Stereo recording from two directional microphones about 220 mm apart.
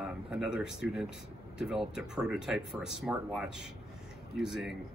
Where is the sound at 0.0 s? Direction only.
5° right (ahead or behind).